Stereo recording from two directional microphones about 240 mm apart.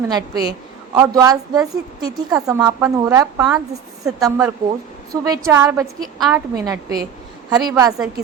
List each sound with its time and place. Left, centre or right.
0.1 s a woman's voice: centre